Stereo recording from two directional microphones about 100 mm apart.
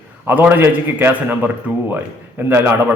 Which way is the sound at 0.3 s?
15° right (ahead or behind).